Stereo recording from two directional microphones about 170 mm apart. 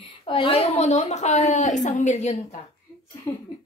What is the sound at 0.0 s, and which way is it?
A woman's voice, 30° left (ahead or behind).